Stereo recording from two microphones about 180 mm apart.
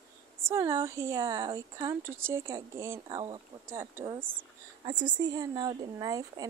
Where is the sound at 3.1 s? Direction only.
25° right (ahead or behind).